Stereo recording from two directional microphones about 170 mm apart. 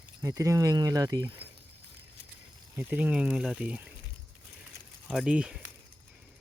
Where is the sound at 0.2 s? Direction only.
20° right (ahead or behind).